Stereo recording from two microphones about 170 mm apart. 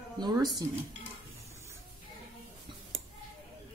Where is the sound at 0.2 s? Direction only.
20° right (ahead or behind).